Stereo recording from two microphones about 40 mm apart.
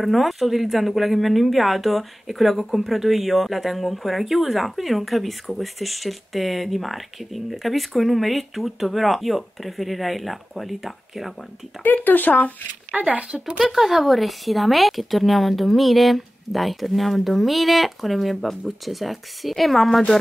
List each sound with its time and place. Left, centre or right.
0.0 s speech: centre
11.8 s speech: left
12.9 s speech: right
13.6 s speech: centre